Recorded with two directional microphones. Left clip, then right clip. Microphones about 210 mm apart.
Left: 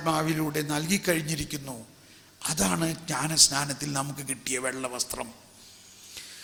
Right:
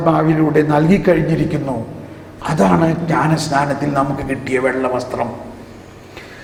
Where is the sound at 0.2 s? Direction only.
25° left (ahead or behind).